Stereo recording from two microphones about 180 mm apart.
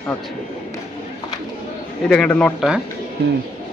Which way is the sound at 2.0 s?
5° left (ahead or behind).